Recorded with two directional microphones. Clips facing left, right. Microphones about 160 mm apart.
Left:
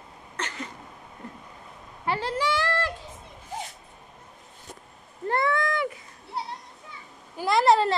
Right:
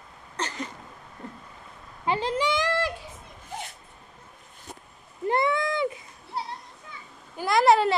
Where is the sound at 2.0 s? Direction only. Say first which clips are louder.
Right 2 dB; 20° right (ahead or behind).